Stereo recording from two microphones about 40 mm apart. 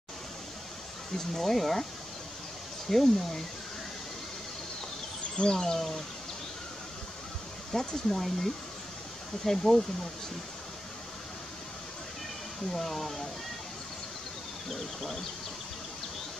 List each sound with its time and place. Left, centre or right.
1.1 s speech: centre
2.9 s speech: centre
5.4 s speech: centre
7.7 s speech: centre
12.7 s speech: centre
14.7 s speech: centre